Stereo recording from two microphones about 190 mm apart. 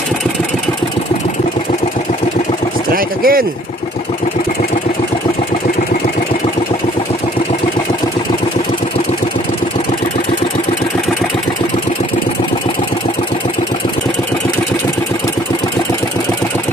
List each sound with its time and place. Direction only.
2.9 s speech: 50° right (ahead or behind)